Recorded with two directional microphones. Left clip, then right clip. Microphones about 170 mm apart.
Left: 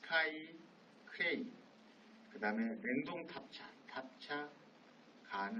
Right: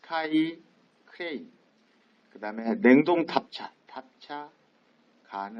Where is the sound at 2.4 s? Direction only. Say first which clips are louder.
Right 12 dB; 25° left (ahead or behind).